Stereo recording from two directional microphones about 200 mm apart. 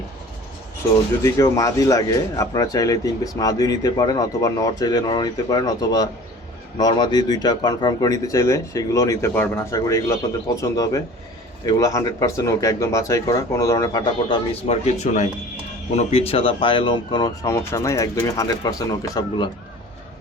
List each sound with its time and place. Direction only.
1.2 s speech: 15° left (ahead or behind)